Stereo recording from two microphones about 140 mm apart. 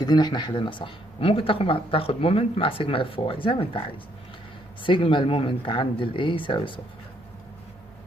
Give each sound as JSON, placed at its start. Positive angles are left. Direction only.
{"t": 0.0, "sound": "speech", "side_deg": 30}
{"t": 4.8, "sound": "speech", "side_deg": 35}